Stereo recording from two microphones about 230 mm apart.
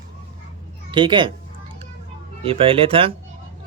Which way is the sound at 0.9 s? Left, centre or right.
Right.